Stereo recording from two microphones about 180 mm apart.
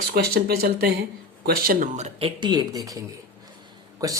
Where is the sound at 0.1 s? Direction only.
60° right (ahead or behind).